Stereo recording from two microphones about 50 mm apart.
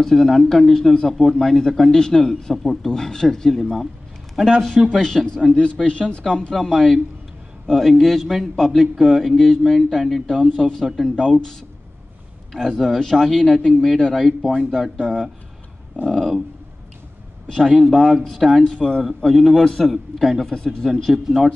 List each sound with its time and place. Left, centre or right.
0.0 s a man's voice: centre
4.9 s a man's voice: centre
10.9 s speech: centre
12.5 s a man's voice: centre
14.2 s a man's voice: centre
17.6 s a man's voice: centre
18.8 s speech: centre
19.0 s a man's voice: centre